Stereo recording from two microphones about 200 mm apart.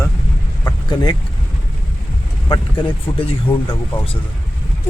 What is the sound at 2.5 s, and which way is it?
Speech, 25° left (ahead or behind).